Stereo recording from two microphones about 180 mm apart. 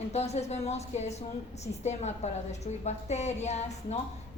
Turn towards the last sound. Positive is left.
turn(degrees=40)  # may be behind; listen again after turning